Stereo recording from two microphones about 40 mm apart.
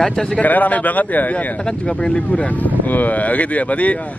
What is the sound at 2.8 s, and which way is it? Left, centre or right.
Speech, left.